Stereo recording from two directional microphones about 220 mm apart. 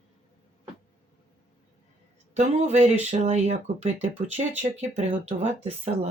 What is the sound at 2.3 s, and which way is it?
Speech, 30° right (ahead or behind).